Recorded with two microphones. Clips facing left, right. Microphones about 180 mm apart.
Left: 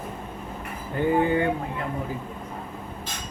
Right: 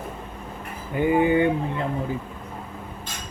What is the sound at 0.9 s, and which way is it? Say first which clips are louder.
Speech: right 3 dB; 15° right (ahead or behind).